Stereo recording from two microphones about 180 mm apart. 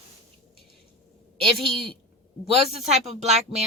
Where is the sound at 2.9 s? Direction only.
40° right (ahead or behind).